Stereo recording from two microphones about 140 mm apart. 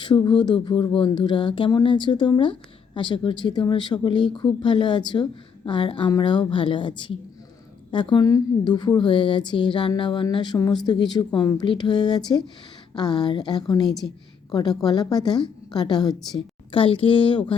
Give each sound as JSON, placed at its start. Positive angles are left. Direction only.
{"t": 0.0, "sound": "a woman's voice", "side_deg": 35}
{"t": 13.8, "sound": "a woman's voice", "side_deg": 0}
{"t": 14.5, "sound": "a woman's voice", "side_deg": 25}